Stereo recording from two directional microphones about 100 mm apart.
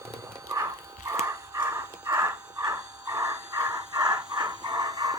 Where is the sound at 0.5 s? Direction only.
30° right (ahead or behind).